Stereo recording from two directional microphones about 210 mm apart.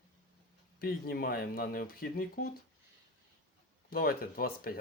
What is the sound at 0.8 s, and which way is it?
Speech, 45° left (ahead or behind).